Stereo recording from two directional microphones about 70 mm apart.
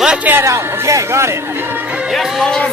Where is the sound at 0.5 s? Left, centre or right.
Right.